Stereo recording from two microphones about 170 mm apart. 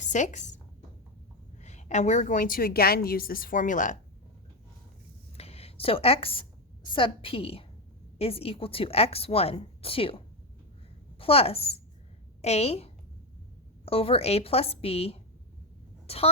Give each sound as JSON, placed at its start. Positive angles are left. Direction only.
{"t": 0.0, "sound": "speech", "side_deg": 45}
{"t": 1.6, "sound": "a woman's voice", "side_deg": 45}
{"t": 5.4, "sound": "a woman's voice", "side_deg": 35}